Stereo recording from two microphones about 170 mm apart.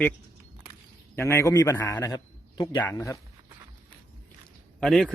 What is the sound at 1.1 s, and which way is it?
A man's voice, 15° left (ahead or behind).